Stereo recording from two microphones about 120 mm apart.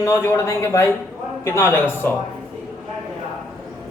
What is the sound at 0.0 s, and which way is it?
Speech, 20° left (ahead or behind).